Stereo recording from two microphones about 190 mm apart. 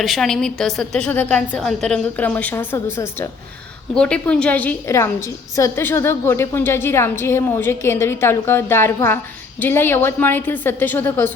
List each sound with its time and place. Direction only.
0.0 s a woman's voice: centre (ahead or behind)